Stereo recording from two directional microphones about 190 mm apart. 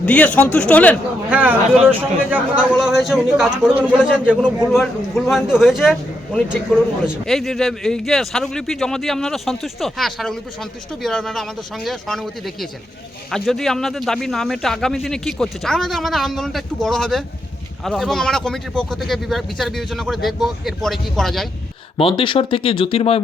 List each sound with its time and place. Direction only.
0.0 s a man's voice: 5° left (ahead or behind)
1.3 s a man's voice: 10° right (ahead or behind)
21.9 s speech: 25° left (ahead or behind)